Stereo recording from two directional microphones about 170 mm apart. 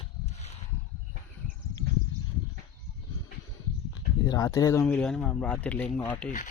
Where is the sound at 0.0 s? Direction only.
40° left (ahead or behind).